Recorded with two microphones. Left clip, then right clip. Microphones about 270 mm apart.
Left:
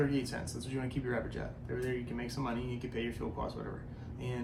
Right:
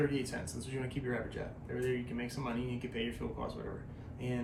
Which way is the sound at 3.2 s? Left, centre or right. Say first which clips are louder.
Left 1 dB; centre.